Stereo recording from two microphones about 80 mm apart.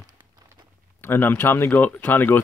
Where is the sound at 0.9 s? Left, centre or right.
Left.